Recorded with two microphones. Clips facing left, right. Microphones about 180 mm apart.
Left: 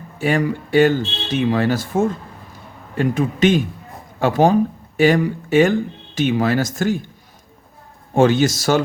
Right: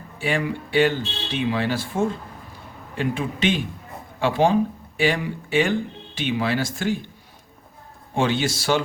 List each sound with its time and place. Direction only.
0.2 s speech: 45° left (ahead or behind)
8.1 s speech: 45° left (ahead or behind)